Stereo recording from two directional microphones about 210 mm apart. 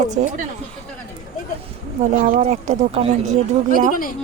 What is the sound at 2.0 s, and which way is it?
Speech, 35° right (ahead or behind).